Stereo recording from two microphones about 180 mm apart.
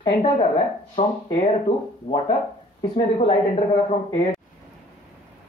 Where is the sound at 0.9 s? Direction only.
35° left (ahead or behind).